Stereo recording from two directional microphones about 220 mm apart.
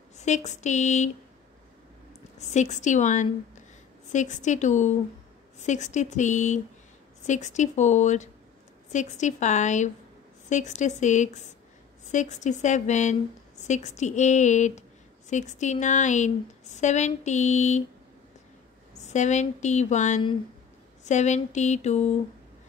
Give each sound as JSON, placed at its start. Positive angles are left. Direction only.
{"t": 0.2, "sound": "a woman's voice", "side_deg": 30}
{"t": 2.3, "sound": "a woman's voice", "side_deg": 30}
{"t": 19.0, "sound": "a woman's voice", "side_deg": 30}